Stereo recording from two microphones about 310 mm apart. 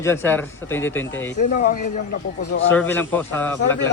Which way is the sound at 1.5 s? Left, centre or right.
Left.